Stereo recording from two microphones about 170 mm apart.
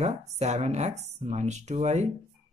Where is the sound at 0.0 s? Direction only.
45° right (ahead or behind).